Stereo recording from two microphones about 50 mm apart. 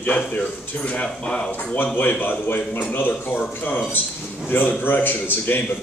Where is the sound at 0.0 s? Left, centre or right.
Left.